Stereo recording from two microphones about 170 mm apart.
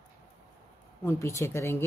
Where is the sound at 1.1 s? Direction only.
15° left (ahead or behind).